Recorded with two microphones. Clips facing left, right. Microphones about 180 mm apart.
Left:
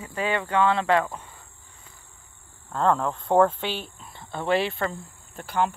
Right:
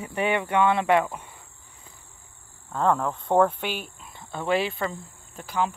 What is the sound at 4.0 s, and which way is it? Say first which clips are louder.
Speech: left 1 dB; centre (ahead or behind).